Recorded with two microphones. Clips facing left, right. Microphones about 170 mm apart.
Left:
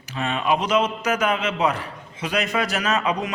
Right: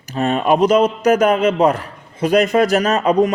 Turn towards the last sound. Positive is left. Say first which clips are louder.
# right 9 dB
turn(degrees=-40)  # may be behind; listen again after turning